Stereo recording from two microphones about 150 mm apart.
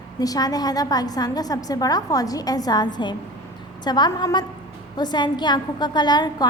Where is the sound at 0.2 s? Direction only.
25° left (ahead or behind).